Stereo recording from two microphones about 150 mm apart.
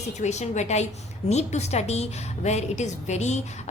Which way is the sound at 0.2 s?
50° left (ahead or behind).